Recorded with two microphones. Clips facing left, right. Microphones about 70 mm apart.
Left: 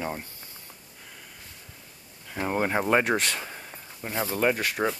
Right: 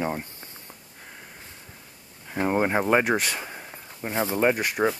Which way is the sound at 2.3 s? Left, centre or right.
Centre.